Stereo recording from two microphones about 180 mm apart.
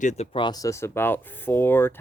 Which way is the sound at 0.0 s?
40° left (ahead or behind).